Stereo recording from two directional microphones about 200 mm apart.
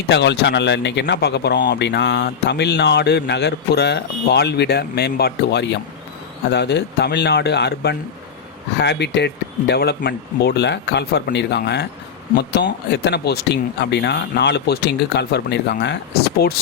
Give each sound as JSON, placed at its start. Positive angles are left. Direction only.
{"t": 0.1, "sound": "speech", "side_deg": 60}